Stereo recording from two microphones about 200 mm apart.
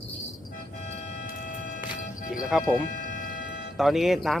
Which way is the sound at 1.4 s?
40° left (ahead or behind).